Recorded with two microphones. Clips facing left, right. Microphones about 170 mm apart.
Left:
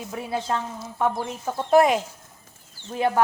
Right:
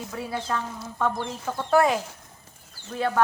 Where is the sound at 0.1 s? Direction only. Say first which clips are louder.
Left 3 dB; 25° left (ahead or behind).